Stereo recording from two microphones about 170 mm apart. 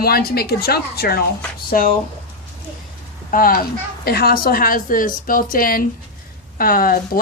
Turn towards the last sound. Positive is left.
turn(degrees=60)  # may be behind; listen again after turning